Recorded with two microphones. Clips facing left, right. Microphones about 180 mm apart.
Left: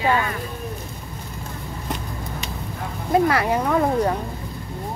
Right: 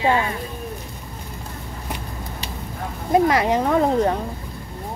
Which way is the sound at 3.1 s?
20° right (ahead or behind).